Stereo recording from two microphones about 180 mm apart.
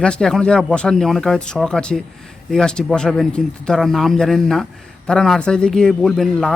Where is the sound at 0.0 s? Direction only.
5° left (ahead or behind).